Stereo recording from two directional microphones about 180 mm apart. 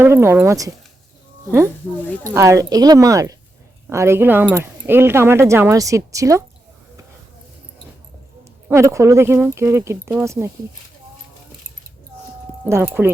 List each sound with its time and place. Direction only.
0.0 s speech: 15° right (ahead or behind)
8.7 s speech: 15° right (ahead or behind)
12.6 s speech: 15° right (ahead or behind)